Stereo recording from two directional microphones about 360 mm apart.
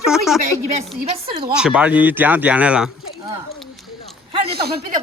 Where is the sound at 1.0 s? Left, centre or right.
Centre.